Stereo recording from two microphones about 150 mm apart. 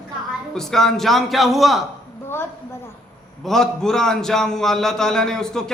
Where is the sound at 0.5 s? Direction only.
5° left (ahead or behind).